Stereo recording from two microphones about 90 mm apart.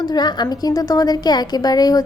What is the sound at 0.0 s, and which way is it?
A woman's voice, 50° left (ahead or behind).